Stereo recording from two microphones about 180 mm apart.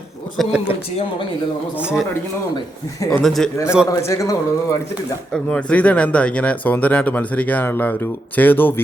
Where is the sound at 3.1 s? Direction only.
Centre (ahead or behind).